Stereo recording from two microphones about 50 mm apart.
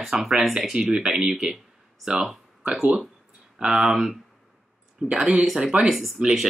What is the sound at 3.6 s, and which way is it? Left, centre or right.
Speech, centre.